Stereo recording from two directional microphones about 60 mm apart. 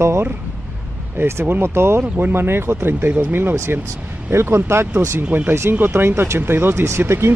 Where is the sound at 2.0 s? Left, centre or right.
Right.